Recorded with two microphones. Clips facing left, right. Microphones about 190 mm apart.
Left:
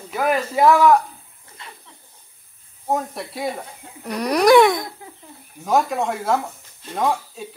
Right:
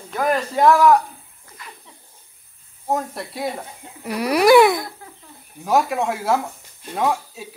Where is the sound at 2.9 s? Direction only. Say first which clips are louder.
Even; centre (ahead or behind).